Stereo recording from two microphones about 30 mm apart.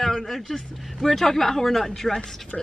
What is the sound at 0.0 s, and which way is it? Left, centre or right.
Vehicle, centre.